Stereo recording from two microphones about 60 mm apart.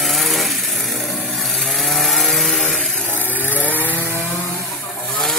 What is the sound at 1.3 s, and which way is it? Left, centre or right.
Chainsaw, centre.